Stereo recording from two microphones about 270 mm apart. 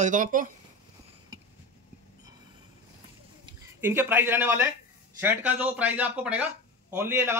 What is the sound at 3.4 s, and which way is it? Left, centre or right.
Speech, centre.